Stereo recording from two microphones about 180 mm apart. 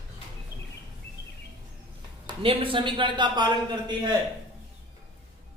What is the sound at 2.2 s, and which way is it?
A man's voice, 30° right (ahead or behind).